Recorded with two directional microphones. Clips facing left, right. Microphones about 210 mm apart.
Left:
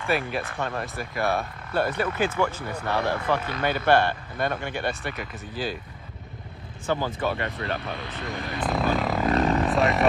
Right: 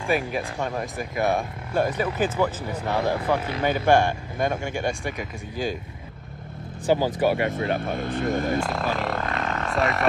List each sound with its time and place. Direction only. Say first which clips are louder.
0.0 s speech: right 2 dB; 15° right (ahead or behind)
7.1 s speech: right 6 dB; 15° right (ahead or behind)
7.7 s speech: right 6 dB; 50° right (ahead or behind)
8.5 s a sound: left 1 dB; centre (ahead or behind)